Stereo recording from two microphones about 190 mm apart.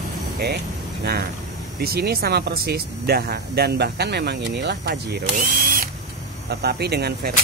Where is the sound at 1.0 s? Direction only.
55° right (ahead or behind).